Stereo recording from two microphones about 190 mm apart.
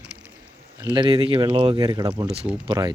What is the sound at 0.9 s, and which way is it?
Speech, 25° right (ahead or behind).